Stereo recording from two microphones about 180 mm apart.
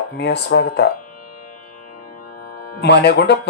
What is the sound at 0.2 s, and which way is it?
Speech, 70° left (ahead or behind).